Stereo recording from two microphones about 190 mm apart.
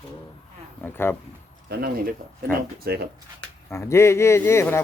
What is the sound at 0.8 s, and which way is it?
Speech, 10° left (ahead or behind).